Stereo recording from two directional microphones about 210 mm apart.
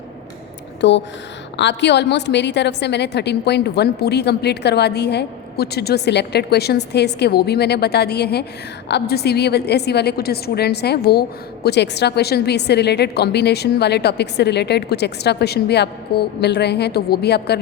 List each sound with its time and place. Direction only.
0.8 s a woman's voice: 55° left (ahead or behind)